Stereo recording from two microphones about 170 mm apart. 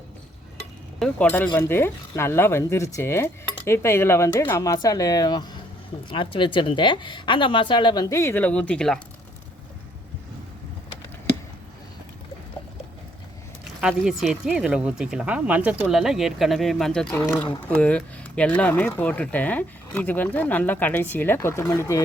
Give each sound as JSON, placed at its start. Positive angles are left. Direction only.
{"t": 0.9, "sound": "a woman's voice", "side_deg": 5}
{"t": 13.8, "sound": "speech", "side_deg": 0}